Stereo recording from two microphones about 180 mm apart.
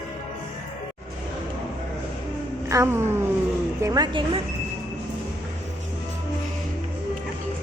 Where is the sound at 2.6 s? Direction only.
15° right (ahead or behind).